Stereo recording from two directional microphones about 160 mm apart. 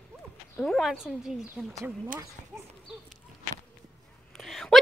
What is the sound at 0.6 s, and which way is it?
Speech, centre (ahead or behind).